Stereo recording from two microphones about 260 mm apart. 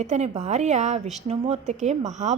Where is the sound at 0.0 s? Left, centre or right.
Right.